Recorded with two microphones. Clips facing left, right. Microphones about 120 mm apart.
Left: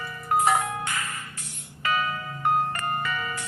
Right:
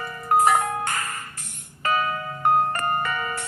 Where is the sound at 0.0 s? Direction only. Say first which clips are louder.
Right 4 dB; 50° right (ahead or behind).